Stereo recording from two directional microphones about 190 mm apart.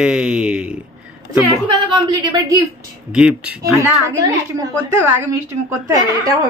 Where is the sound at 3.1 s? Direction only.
5° right (ahead or behind).